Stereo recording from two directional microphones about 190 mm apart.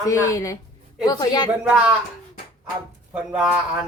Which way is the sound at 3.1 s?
5° right (ahead or behind).